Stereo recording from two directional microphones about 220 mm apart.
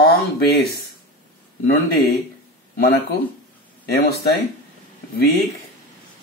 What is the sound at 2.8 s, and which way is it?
Speech, 45° left (ahead or behind).